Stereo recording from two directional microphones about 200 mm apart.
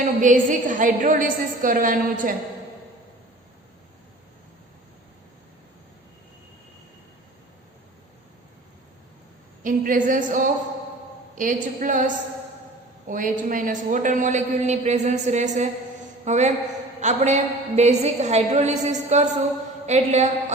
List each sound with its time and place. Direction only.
0.0 s a man's voice: 40° right (ahead or behind)
9.6 s a man's voice: 40° right (ahead or behind)